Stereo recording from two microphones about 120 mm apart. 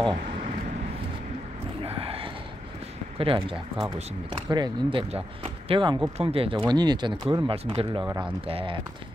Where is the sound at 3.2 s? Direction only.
50° right (ahead or behind).